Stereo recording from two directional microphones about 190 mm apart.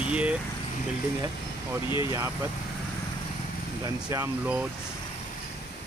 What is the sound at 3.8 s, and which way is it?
Speech, 15° right (ahead or behind).